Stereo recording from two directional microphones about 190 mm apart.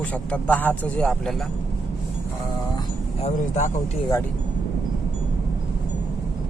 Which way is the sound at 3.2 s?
40° left (ahead or behind).